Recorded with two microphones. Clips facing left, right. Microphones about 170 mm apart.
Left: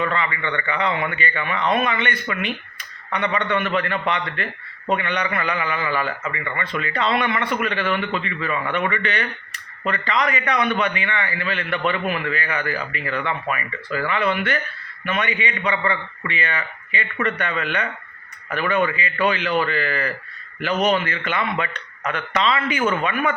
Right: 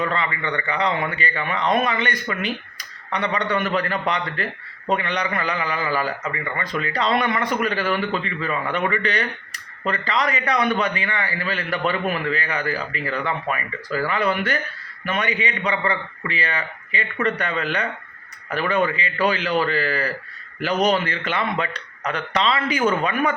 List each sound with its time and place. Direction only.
0.0 s a man's voice: 35° right (ahead or behind)